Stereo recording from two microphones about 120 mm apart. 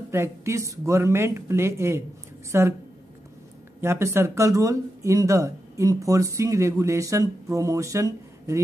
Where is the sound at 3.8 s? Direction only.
20° right (ahead or behind).